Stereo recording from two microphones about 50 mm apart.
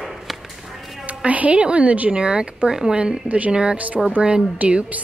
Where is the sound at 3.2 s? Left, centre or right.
Right.